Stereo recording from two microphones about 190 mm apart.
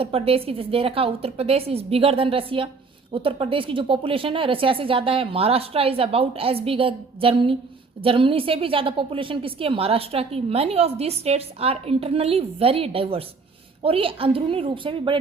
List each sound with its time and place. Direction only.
0.0 s a woman's voice: 30° right (ahead or behind)